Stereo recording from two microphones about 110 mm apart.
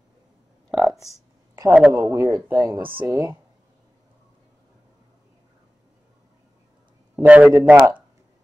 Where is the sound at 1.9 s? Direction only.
25° right (ahead or behind).